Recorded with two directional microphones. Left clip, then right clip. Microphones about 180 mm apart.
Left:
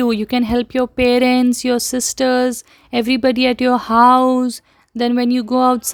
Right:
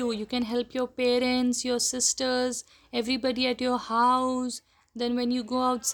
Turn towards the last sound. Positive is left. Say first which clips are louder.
# left 12 dB
turn(degrees=45)  # may be behind; listen again after turning